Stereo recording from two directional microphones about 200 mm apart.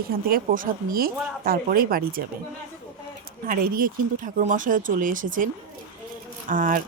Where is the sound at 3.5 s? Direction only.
45° right (ahead or behind).